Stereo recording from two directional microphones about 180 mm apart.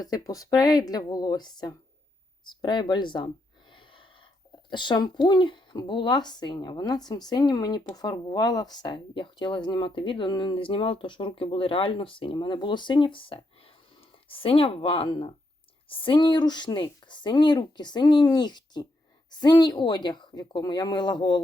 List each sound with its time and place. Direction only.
0.0 s speech: 20° left (ahead or behind)
3.7 s gasp: 25° left (ahead or behind)
4.7 s speech: 25° left (ahead or behind)